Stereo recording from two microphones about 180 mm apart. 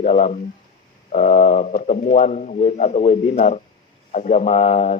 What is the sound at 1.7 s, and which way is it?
A man's voice, 45° left (ahead or behind).